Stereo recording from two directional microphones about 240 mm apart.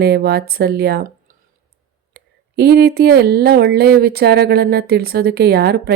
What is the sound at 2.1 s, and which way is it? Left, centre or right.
A woman's voice, right.